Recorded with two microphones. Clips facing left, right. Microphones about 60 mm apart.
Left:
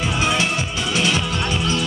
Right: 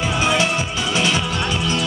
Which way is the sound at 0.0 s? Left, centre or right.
Centre.